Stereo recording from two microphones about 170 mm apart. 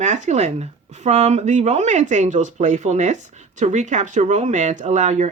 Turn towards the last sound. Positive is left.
turn(degrees=-45)  # may be behind; listen again after turning